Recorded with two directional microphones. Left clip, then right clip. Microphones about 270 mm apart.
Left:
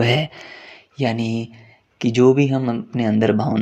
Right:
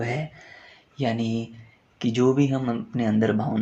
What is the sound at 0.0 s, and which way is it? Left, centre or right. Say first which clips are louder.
Speech: left 11 dB; left.